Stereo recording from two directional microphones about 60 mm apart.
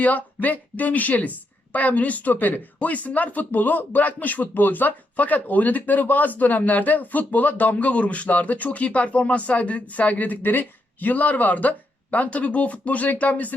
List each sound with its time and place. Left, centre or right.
0.0 s speech: left